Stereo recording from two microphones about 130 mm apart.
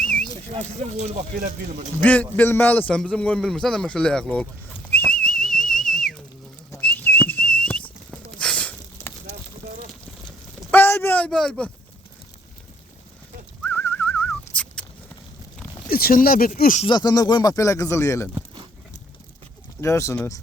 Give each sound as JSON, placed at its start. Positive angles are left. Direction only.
{"t": 0.0, "sound": "a sound", "side_deg": 5}
{"t": 0.5, "sound": "speech", "side_deg": -55}
{"t": 2.0, "sound": "a man's voice", "side_deg": 10}
{"t": 4.9, "sound": "whistle", "side_deg": 10}
{"t": 6.7, "sound": "whistling", "side_deg": 15}
{"t": 10.7, "sound": "a sound", "side_deg": 15}
{"t": 13.7, "sound": "whistling", "side_deg": 15}
{"t": 14.5, "sound": "a sound", "side_deg": 10}
{"t": 16.1, "sound": "speech", "side_deg": 90}
{"t": 16.8, "sound": "speech", "side_deg": 35}
{"t": 19.8, "sound": "speech", "side_deg": 20}